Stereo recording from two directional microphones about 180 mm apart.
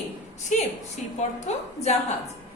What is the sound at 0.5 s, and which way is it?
A woman's voice, 45° left (ahead or behind).